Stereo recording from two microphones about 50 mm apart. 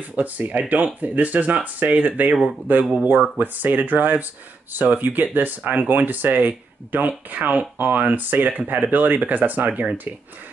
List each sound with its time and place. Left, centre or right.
0.1 s speech: right